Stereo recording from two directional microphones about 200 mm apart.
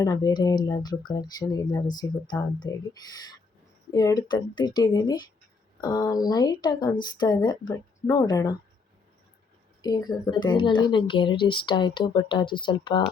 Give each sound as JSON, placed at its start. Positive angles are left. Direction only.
{"t": 0.0, "sound": "speech", "side_deg": 20}
{"t": 3.9, "sound": "speech", "side_deg": 20}
{"t": 9.8, "sound": "speech", "side_deg": 20}